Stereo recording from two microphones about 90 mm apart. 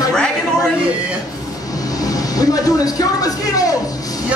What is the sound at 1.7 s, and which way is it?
Vehicle, 45° left (ahead or behind).